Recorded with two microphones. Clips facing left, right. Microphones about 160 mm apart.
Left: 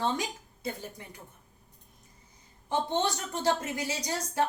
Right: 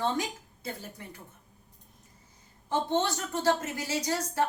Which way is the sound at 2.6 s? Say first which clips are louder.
Right 1 dB; 15° left (ahead or behind).